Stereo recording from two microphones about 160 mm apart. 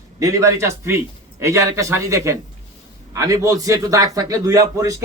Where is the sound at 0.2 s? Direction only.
20° right (ahead or behind).